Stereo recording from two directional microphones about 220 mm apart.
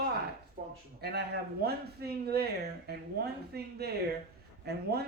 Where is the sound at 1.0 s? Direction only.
45° right (ahead or behind).